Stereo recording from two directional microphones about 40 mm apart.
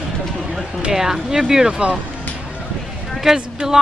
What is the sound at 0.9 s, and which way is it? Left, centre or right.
A man's voice, centre.